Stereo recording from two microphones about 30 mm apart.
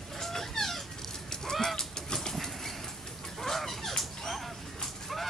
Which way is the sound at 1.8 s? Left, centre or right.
Left.